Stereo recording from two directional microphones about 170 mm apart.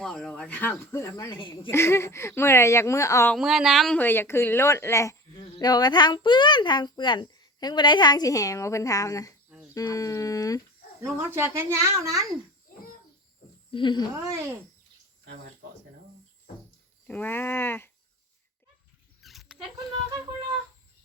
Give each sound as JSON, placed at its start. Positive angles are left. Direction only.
{"t": 0.0, "sound": "speech", "side_deg": 5}
{"t": 3.3, "sound": "speech", "side_deg": 0}
{"t": 11.0, "sound": "speech", "side_deg": -15}
{"t": 13.7, "sound": "speech", "side_deg": 30}
{"t": 14.1, "sound": "speech", "side_deg": -15}
{"t": 17.1, "sound": "speech", "side_deg": 10}
{"t": 19.2, "sound": "a sound", "side_deg": 0}